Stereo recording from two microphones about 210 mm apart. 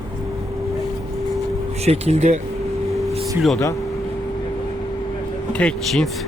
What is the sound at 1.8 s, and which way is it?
Speech, 30° right (ahead or behind).